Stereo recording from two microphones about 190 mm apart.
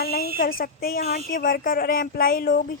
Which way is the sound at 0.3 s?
50° left (ahead or behind).